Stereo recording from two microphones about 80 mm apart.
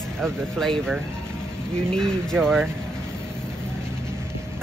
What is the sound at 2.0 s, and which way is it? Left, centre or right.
Speech, centre.